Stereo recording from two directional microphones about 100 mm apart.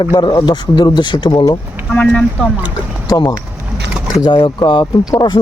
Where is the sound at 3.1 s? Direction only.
45° left (ahead or behind).